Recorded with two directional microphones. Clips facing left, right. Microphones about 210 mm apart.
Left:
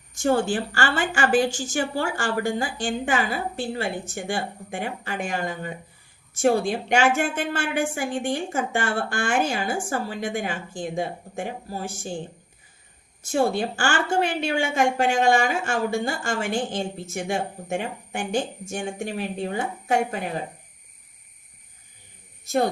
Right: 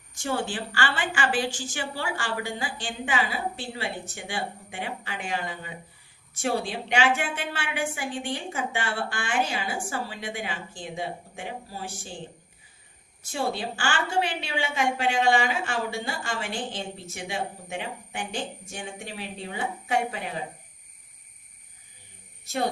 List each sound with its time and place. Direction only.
0.1 s a woman's voice: 45° left (ahead or behind)
13.2 s a woman's voice: 45° left (ahead or behind)